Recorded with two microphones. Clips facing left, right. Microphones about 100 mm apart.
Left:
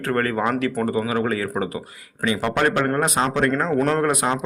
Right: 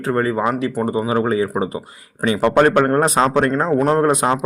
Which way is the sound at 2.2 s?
35° right (ahead or behind).